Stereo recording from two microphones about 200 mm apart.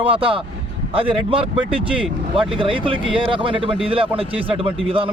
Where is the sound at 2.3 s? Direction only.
25° right (ahead or behind).